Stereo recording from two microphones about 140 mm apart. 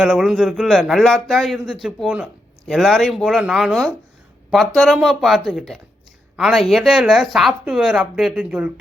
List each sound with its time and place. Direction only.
0.0 s speech: 5° right (ahead or behind)